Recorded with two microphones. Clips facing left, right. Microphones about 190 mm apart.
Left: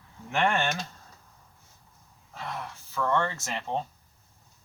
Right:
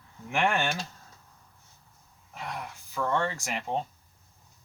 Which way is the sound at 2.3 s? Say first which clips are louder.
Left 1 dB; 15° right (ahead or behind).